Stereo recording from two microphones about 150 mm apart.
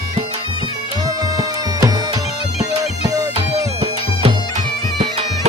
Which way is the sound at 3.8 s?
45° right (ahead or behind).